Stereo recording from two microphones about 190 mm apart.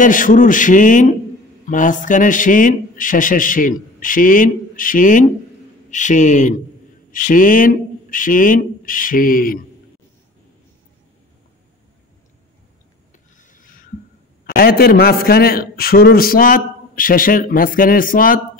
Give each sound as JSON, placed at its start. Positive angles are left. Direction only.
{"t": 0.0, "sound": "a man's voice", "side_deg": 45}
{"t": 13.4, "sound": "a sound", "side_deg": 45}
{"t": 14.4, "sound": "a man's voice", "side_deg": 55}